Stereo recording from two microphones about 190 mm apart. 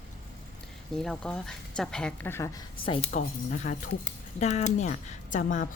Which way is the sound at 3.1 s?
40° left (ahead or behind).